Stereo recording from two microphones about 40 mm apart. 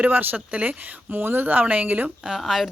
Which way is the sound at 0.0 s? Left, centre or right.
Right.